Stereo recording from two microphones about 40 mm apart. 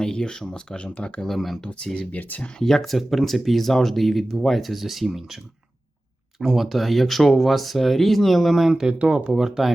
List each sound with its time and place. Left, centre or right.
0.0 s speech: centre
1.2 s speech: centre
1.6 s speech: centre
2.1 s speech: left
2.6 s speech: centre
6.4 s speech: centre